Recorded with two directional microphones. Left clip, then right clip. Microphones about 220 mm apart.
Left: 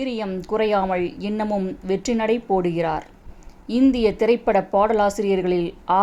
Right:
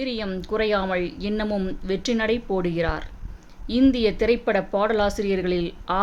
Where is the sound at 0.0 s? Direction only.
5° left (ahead or behind).